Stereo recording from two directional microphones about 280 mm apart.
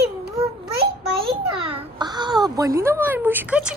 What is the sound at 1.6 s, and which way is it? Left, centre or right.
A child's voice, centre.